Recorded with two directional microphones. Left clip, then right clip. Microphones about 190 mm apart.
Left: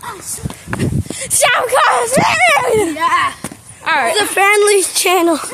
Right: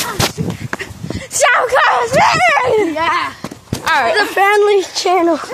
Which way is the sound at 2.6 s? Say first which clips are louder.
Right 1 dB; 25° left (ahead or behind).